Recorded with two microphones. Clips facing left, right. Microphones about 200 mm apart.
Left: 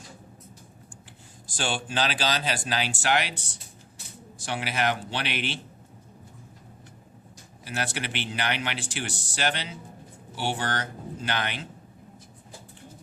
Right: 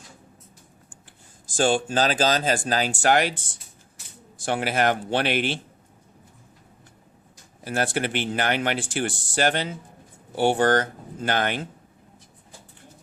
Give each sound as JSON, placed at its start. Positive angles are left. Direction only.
{"t": 1.5, "sound": "speech", "side_deg": -45}
{"t": 4.4, "sound": "speech", "side_deg": -50}
{"t": 7.6, "sound": "speech", "side_deg": -50}